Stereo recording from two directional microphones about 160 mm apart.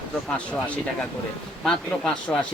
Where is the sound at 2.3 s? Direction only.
10° left (ahead or behind).